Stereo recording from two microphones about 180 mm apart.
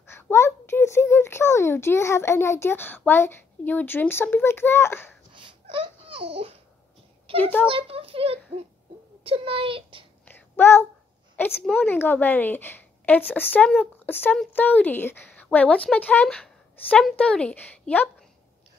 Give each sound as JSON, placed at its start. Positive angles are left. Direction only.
{"t": 0.0, "sound": "a child's voice", "side_deg": 15}
{"t": 5.3, "sound": "babbling", "side_deg": -25}
{"t": 7.6, "sound": "a child's voice", "side_deg": -30}
{"t": 10.2, "sound": "a sound", "side_deg": 15}
{"t": 11.4, "sound": "a woman's voice", "side_deg": 10}